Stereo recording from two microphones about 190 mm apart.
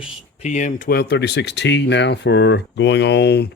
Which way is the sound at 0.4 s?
40° left (ahead or behind).